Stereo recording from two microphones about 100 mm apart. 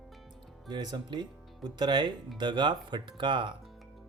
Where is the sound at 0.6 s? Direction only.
45° right (ahead or behind).